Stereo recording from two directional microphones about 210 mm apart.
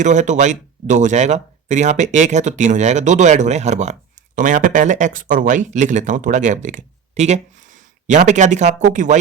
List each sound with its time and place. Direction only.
0.0 s speech: 35° right (ahead or behind)